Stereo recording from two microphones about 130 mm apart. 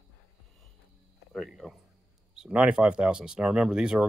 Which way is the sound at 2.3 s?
5° right (ahead or behind).